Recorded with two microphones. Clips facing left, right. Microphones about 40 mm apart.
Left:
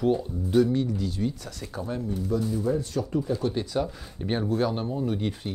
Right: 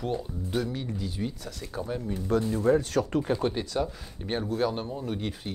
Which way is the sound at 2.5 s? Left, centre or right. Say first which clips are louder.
Right 3 dB; right.